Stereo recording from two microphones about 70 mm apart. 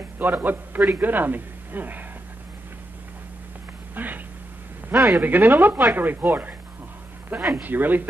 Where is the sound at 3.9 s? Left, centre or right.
Right.